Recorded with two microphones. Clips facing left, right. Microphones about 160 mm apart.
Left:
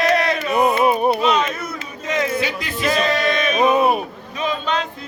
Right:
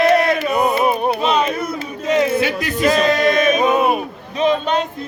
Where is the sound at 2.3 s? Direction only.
50° right (ahead or behind).